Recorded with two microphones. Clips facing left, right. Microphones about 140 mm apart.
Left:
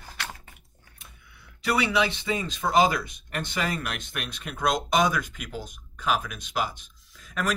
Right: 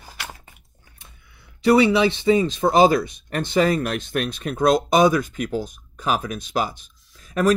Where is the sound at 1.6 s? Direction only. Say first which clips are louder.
Right 9 dB; 30° right (ahead or behind).